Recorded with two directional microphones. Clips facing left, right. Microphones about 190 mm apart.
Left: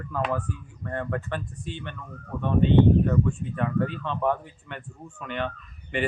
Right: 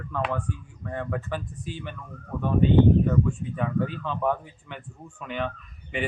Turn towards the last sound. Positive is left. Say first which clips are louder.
# left 2 dB
turn(degrees=0)  # may be behind; listen again after turning